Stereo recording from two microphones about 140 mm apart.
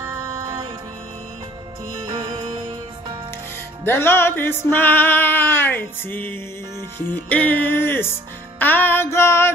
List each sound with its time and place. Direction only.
2.0 s music: 30° right (ahead or behind)
3.8 s music: 15° left (ahead or behind)